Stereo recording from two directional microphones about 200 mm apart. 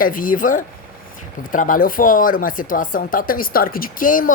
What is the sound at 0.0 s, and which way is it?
Speech, 45° left (ahead or behind).